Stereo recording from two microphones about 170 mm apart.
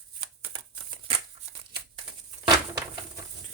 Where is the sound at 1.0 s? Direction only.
35° right (ahead or behind).